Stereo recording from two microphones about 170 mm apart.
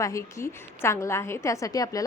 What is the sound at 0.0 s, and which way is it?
A woman's voice, 15° left (ahead or behind).